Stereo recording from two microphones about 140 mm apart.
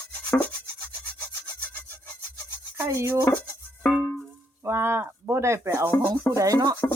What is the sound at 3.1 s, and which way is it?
Speech, 15° left (ahead or behind).